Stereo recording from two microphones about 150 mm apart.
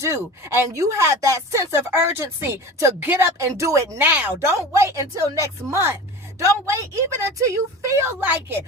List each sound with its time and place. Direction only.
0.0 s speech: 20° right (ahead or behind)